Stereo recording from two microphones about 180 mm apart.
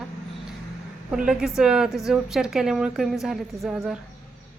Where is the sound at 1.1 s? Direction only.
5° right (ahead or behind).